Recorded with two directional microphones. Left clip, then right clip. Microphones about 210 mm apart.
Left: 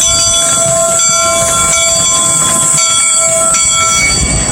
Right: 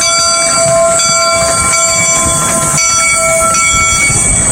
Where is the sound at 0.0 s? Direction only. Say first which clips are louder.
Right 1 dB; 5° left (ahead or behind).